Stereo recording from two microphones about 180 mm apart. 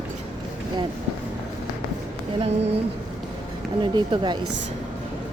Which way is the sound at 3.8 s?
25° right (ahead or behind).